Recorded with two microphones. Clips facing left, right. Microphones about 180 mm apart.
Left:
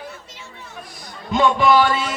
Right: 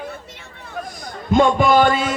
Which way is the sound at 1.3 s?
50° right (ahead or behind).